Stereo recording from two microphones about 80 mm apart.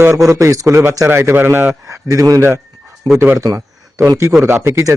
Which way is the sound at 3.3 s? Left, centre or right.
Right.